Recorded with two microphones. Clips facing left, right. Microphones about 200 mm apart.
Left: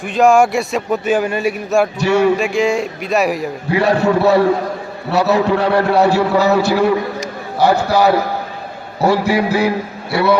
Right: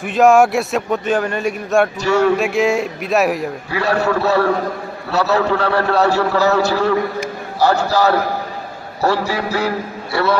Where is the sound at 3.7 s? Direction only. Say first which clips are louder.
Left 4 dB; 20° left (ahead or behind).